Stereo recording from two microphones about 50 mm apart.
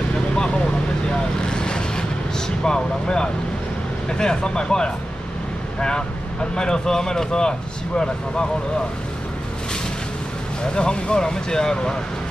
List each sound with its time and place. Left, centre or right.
1.5 s vehicle: centre
2.6 s speech: centre
10.6 s speech: centre